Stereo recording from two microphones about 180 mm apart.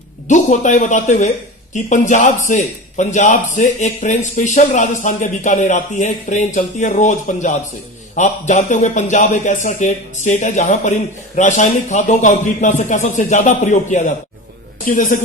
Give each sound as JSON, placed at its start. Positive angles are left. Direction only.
{"t": 0.3, "sound": "a man's voice", "side_deg": 45}